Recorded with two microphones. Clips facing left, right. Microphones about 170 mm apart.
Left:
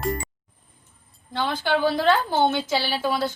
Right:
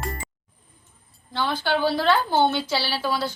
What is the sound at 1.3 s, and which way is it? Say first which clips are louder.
A woman's voice: left 1 dB; 15° left (ahead or behind).